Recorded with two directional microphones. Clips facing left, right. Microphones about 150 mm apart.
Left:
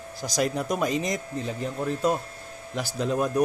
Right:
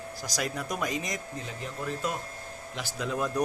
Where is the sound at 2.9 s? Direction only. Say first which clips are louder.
Left 5 dB; 30° left (ahead or behind).